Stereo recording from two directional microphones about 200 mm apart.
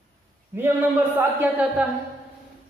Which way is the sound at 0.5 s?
10° right (ahead or behind).